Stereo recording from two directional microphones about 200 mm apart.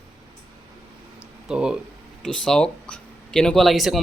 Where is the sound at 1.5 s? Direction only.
5° right (ahead or behind).